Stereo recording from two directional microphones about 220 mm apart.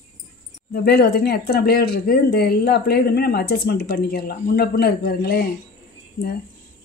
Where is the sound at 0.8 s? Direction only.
45° left (ahead or behind).